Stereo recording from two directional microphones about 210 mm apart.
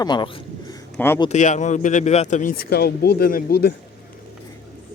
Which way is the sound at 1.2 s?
35° left (ahead or behind).